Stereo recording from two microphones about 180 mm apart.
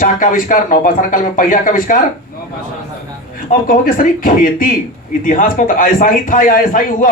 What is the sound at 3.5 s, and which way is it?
A man's voice, 50° left (ahead or behind).